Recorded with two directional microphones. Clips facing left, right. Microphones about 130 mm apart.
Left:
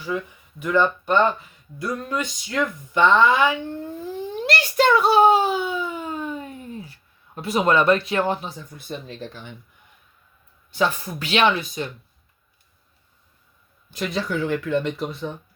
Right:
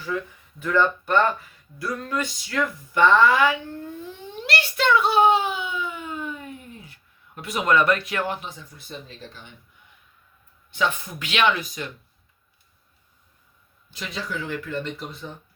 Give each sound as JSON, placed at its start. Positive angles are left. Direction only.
{"t": 0.0, "sound": "speech", "side_deg": 15}
{"t": 4.4, "sound": "a sound", "side_deg": 40}
{"t": 8.9, "sound": "speech", "side_deg": 60}
{"t": 10.7, "sound": "speech", "side_deg": 35}
{"t": 13.9, "sound": "speech", "side_deg": 50}